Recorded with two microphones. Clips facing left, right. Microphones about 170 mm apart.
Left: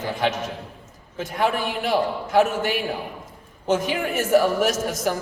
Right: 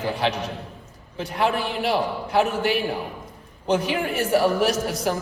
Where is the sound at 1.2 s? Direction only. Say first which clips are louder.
Even; 45° left (ahead or behind).